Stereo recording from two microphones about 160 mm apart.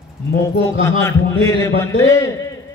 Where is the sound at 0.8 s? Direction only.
15° left (ahead or behind).